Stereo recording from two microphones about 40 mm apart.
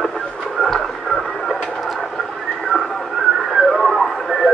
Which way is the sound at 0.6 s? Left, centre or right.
Centre.